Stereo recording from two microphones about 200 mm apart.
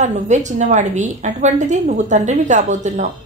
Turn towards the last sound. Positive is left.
turn(degrees=-35)  # may be behind; listen again after turning